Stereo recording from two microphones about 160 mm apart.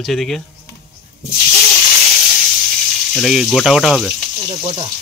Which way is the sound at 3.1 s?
Centre (ahead or behind).